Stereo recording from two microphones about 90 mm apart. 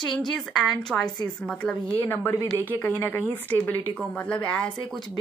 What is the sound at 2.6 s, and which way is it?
Speech, 25° left (ahead or behind).